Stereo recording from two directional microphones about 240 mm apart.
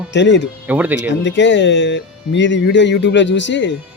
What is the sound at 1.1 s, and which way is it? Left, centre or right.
Speech, left.